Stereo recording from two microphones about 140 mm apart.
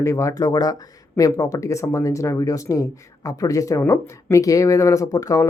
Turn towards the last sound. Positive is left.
turn(degrees=25)  # may be behind; listen again after turning